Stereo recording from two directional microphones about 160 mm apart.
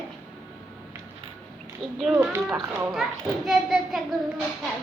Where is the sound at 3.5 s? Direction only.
Centre (ahead or behind).